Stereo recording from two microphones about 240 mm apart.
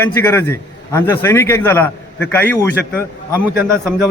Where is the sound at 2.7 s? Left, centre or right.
Left.